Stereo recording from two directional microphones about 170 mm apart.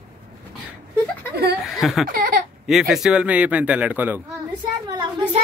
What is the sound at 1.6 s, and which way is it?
Speech, centre (ahead or behind).